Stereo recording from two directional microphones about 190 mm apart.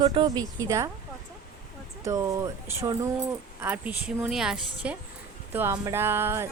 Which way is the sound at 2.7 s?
15° right (ahead or behind).